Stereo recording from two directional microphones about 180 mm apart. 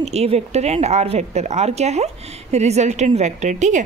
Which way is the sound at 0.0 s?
35° right (ahead or behind).